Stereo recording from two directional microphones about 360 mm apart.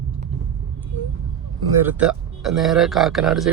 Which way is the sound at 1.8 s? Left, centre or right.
Centre.